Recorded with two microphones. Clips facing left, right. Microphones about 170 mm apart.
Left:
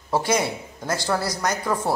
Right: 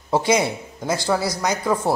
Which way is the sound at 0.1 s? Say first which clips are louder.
Right 3 dB; 15° right (ahead or behind).